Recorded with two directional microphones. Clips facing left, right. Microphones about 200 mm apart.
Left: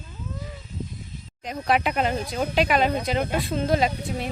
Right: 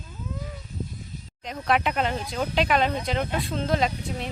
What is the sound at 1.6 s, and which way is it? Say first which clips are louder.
Speech: left 1 dB; 5° left (ahead or behind).